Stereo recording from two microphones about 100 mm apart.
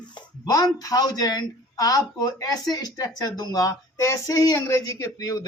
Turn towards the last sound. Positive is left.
turn(degrees=35)  # may be behind; listen again after turning